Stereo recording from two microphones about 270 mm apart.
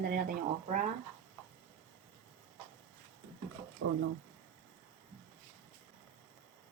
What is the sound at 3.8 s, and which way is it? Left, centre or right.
Speech, right.